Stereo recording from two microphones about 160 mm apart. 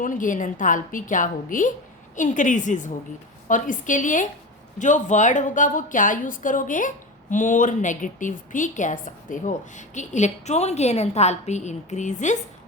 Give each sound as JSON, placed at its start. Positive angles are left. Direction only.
{"t": 0.0, "sound": "a woman's voice", "side_deg": 55}